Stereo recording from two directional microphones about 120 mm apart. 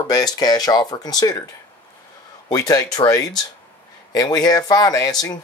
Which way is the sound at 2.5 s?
30° left (ahead or behind).